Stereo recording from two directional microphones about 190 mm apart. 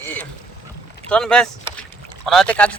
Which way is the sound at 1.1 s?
5° left (ahead or behind).